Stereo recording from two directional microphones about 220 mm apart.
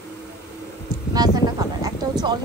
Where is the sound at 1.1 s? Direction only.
15° right (ahead or behind).